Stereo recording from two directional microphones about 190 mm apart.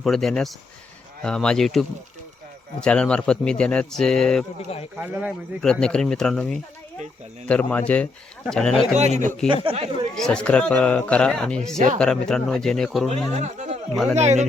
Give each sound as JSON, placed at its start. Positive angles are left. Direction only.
{"t": 0.0, "sound": "speech", "side_deg": 0}
{"t": 4.9, "sound": "speech", "side_deg": -10}
{"t": 5.8, "sound": "speech", "side_deg": 5}
{"t": 9.0, "sound": "speech", "side_deg": -35}
{"t": 10.2, "sound": "speech", "side_deg": 5}
{"t": 13.3, "sound": "speech", "side_deg": -35}